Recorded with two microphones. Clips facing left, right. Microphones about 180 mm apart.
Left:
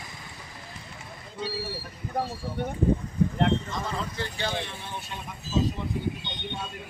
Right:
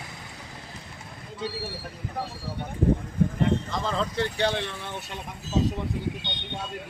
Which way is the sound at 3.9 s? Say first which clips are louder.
Right 6 dB; 65° right (ahead or behind).